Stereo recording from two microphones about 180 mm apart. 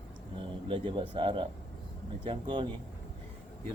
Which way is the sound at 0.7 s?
25° right (ahead or behind).